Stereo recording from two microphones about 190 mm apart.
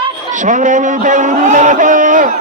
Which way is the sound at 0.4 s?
40° right (ahead or behind).